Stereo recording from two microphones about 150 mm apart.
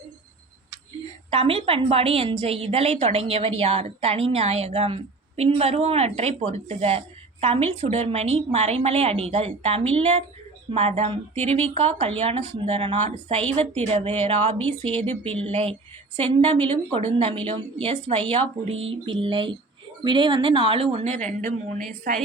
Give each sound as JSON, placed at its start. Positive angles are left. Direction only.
{"t": 1.3, "sound": "a woman's voice", "side_deg": -40}
{"t": 21.2, "sound": "a woman's voice", "side_deg": -65}